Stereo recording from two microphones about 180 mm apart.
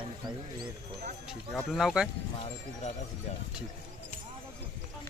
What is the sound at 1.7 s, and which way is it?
Speech, centre (ahead or behind).